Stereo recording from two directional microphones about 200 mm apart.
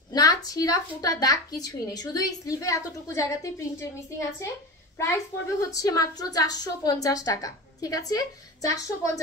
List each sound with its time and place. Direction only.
0.1 s a woman's voice: 20° left (ahead or behind)